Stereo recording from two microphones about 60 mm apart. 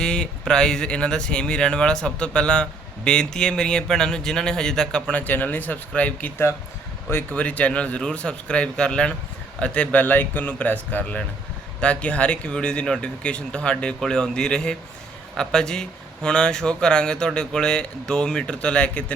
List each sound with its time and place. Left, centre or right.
0.0 s speech: centre
5.2 s speech: left
7.3 s speech: left
10.0 s speech: left